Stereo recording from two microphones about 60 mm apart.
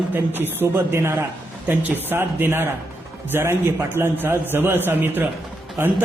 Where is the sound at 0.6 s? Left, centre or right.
Right.